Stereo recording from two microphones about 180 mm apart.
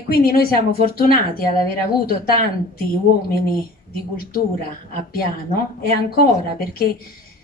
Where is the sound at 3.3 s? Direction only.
55° left (ahead or behind).